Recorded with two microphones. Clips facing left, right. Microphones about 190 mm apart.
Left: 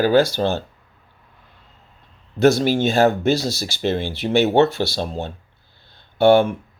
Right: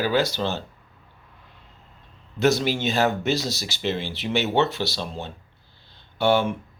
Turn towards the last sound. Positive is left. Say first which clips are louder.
# left 7 dB
turn(degrees=50)  # may be behind; listen again after turning